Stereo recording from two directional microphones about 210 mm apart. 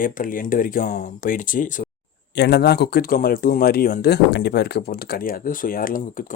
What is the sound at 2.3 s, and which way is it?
Speech, 50° left (ahead or behind).